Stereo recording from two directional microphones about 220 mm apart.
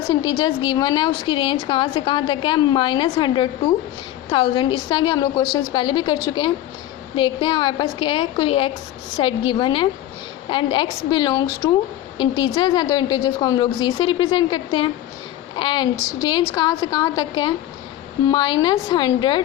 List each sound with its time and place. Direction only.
0.1 s a woman's voice: 20° left (ahead or behind)
7.2 s a woman's voice: 20° left (ahead or behind)